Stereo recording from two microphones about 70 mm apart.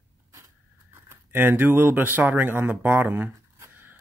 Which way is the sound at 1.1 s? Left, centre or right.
Right.